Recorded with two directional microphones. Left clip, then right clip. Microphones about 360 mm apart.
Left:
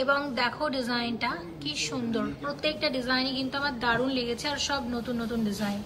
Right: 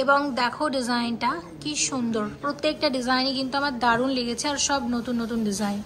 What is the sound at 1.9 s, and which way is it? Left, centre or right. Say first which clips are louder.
A woman's voice: right 3 dB; centre.